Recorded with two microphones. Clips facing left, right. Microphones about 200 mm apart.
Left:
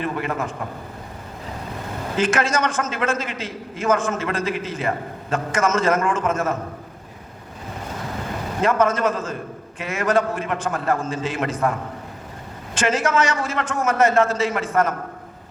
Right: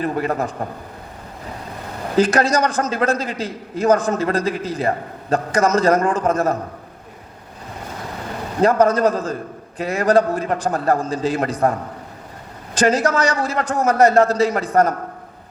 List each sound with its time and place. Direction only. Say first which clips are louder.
0.0 s a man's voice: right 4 dB; 40° right (ahead or behind)
2.1 s a man's voice: right 5 dB; 35° right (ahead or behind)
8.6 s a man's voice: right 5 dB; 35° right (ahead or behind)